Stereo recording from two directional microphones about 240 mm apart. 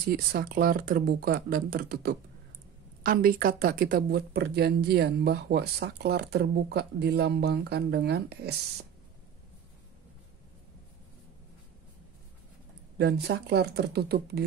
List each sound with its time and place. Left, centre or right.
0.1 s speech: right
12.9 s speech: right